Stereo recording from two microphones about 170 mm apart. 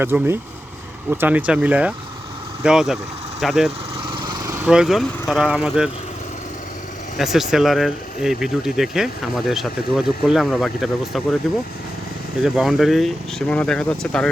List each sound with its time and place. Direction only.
0.0 s speech: 15° right (ahead or behind)
4.1 s lawn mower: 25° right (ahead or behind)
4.5 s speech: 5° right (ahead or behind)
7.2 s speech: centre (ahead or behind)
12.4 s speech: centre (ahead or behind)